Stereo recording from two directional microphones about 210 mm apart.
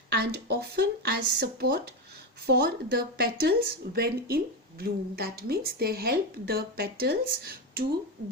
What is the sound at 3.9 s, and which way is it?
Speech, 45° right (ahead or behind).